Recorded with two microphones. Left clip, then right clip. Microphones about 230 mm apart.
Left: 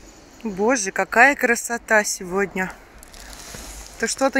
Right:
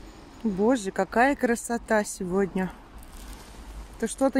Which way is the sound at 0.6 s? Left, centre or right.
Centre.